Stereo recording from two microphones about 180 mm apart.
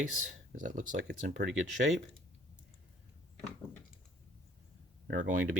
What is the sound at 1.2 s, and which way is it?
Speech, 65° right (ahead or behind).